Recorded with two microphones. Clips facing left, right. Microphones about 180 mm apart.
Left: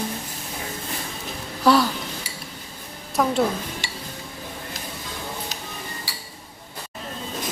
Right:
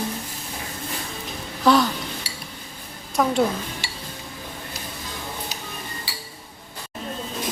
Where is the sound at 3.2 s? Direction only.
Centre (ahead or behind).